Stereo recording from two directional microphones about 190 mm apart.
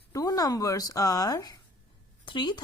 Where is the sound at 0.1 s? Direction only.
20° left (ahead or behind).